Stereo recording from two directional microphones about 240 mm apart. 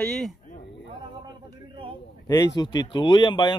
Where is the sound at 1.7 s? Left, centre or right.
Right.